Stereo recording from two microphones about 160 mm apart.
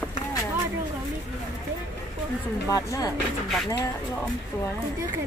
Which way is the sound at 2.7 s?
20° left (ahead or behind).